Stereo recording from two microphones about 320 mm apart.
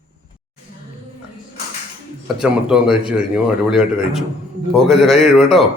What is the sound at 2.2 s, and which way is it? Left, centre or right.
A man's voice, centre.